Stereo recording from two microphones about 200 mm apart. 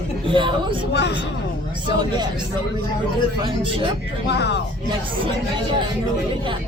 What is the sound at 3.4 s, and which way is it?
Speech, 25° right (ahead or behind).